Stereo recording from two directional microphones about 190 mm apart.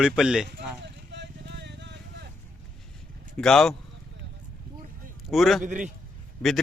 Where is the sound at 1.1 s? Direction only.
65° right (ahead or behind).